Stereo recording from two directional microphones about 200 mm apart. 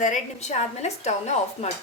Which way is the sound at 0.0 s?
35° left (ahead or behind).